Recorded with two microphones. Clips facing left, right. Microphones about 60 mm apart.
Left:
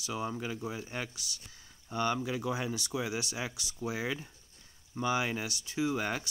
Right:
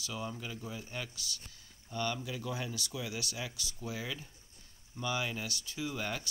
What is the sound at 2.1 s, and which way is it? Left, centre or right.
Speech, left.